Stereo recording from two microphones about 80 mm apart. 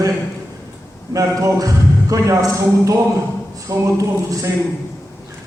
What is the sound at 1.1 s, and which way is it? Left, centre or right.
A man's voice, right.